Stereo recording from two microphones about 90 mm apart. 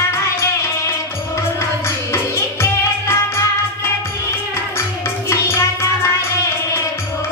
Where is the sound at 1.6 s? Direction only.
30° left (ahead or behind).